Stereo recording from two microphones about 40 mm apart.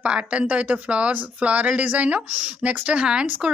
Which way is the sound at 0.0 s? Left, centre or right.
Right.